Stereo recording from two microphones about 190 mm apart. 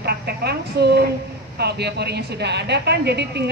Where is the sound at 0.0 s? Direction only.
60° right (ahead or behind).